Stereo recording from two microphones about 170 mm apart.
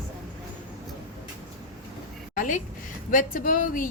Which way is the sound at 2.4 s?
50° left (ahead or behind).